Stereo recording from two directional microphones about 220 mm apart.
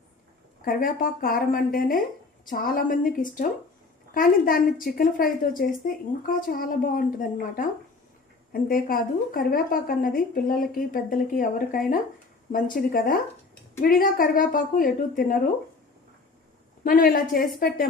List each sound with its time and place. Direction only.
0.6 s a woman's voice: 40° left (ahead or behind)
16.8 s a woman's voice: 40° left (ahead or behind)